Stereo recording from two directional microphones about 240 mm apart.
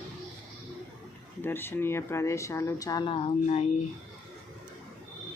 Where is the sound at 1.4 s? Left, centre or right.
Centre; by 3.6 s left.